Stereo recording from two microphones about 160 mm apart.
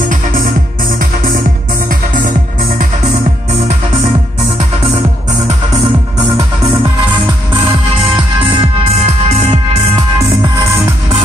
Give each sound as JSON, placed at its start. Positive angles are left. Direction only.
{"t": 0.9, "sound": "music", "side_deg": -65}
{"t": 8.5, "sound": "music", "side_deg": -40}